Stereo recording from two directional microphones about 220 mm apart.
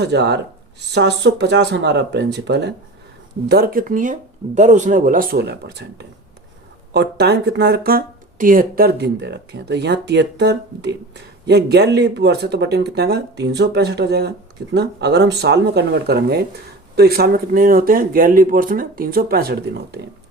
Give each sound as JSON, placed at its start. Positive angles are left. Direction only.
{"t": 0.0, "sound": "speech", "side_deg": -50}